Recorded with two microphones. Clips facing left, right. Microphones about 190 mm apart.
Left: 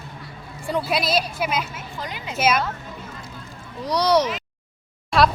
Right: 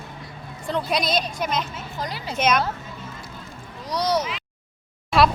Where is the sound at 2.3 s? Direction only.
5° left (ahead or behind).